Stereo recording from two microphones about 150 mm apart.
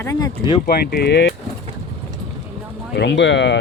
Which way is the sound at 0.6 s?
90° left.